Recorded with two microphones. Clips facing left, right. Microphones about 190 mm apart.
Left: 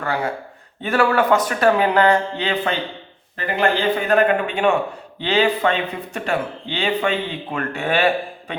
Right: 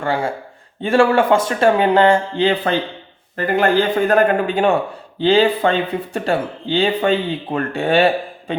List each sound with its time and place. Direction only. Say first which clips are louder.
0.0 s speech: right 3 dB; 30° right (ahead or behind)
3.3 s speech: right 5 dB; 45° right (ahead or behind); by 8.5 s 30° right (ahead or behind)